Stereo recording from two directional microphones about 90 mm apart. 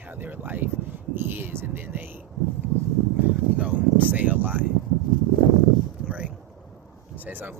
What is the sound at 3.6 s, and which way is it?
Speech, 15° right (ahead or behind).